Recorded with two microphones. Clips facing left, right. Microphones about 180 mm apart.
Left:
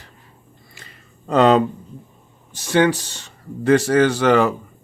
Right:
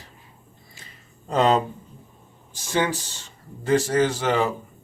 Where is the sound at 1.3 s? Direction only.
70° left (ahead or behind).